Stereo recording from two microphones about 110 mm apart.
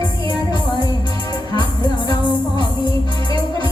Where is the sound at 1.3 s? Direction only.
40° left (ahead or behind).